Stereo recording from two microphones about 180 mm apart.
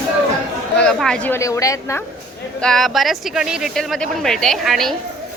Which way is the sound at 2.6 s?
Centre (ahead or behind).